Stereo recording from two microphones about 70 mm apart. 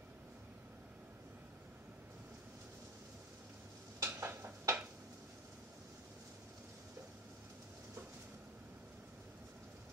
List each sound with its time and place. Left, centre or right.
4.0 s dishes: right